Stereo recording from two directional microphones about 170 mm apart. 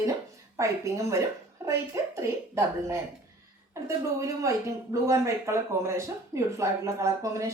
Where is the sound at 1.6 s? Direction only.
15° right (ahead or behind).